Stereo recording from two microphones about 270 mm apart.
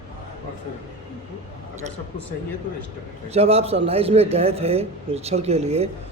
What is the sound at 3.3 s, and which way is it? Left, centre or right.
A man's voice, right.